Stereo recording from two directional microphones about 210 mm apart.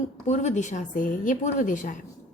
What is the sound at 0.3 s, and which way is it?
A woman's voice, 35° left (ahead or behind).